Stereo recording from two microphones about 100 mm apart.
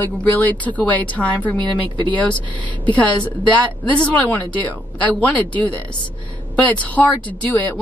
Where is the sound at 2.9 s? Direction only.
15° left (ahead or behind).